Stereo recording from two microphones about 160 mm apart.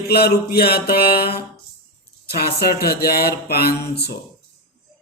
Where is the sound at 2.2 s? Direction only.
75° left (ahead or behind).